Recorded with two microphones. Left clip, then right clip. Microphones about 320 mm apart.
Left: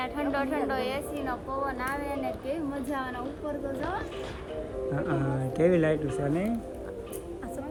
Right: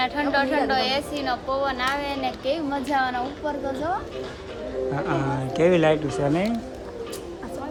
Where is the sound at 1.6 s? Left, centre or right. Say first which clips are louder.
Right 7 dB; centre.